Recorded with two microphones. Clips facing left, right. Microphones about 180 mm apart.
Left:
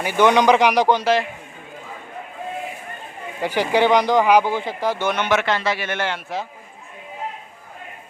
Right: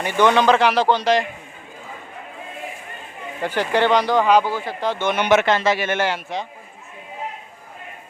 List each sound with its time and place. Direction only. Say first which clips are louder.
0.0 s speech: left 1 dB; 10° left (ahead or behind)
3.4 s speech: left 1 dB; 10° left (ahead or behind)
5.1 s a man's voice: right 3 dB; 20° right (ahead or behind)